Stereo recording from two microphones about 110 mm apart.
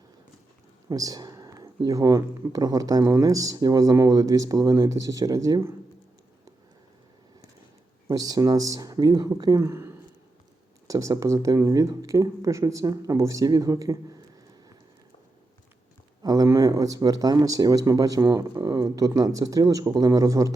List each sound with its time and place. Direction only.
0.9 s speech: 35° right (ahead or behind)
8.1 s speech: 35° right (ahead or behind)
16.2 s speech: 35° right (ahead or behind)